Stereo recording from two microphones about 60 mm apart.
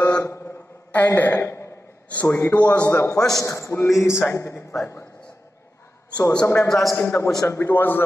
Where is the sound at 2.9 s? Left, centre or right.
Left.